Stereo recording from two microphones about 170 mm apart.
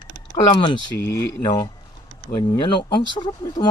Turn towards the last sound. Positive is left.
turn(degrees=25)  # may be behind; listen again after turning